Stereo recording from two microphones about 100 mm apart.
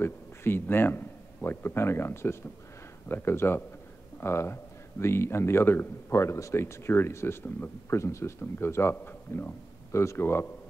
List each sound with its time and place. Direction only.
0.0 s speech: 25° left (ahead or behind)